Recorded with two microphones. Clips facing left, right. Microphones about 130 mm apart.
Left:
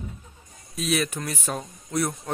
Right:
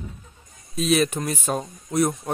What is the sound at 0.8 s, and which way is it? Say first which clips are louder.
Speech: right 5 dB; 25° right (ahead or behind).